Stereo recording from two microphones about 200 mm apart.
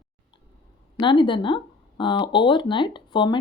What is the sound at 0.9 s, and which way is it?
Speech, 25° left (ahead or behind).